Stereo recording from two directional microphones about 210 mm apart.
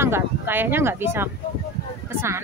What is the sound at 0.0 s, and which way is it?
Speech, 10° right (ahead or behind).